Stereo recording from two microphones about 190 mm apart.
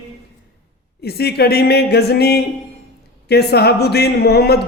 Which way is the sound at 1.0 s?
55° left (ahead or behind).